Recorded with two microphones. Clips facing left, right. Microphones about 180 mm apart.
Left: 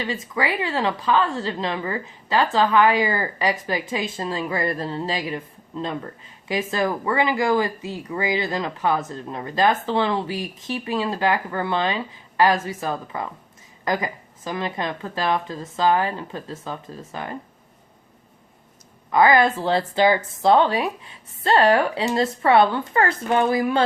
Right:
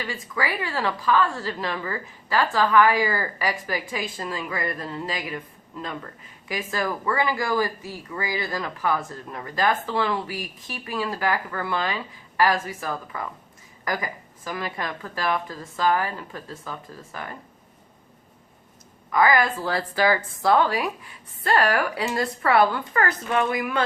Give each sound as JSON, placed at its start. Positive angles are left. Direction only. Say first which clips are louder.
{"t": 0.0, "sound": "a woman's voice", "louder": "left 4 dB", "side_deg": 25}
{"t": 19.1, "sound": "a woman's voice", "louder": "left 4 dB", "side_deg": 25}